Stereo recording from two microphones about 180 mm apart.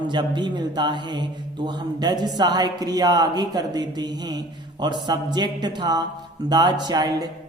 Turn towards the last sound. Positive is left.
turn(degrees=-25)  # may be behind; listen again after turning